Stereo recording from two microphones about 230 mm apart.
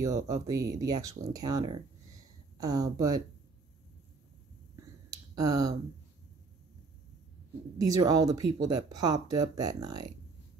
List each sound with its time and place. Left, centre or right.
0.0 s speech: centre
4.7 s finger snapping: centre
7.8 s speech: centre